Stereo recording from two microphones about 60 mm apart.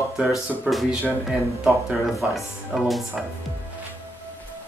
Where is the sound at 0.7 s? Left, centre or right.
Right.